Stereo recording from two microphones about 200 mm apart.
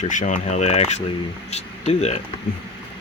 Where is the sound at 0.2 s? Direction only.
40° left (ahead or behind).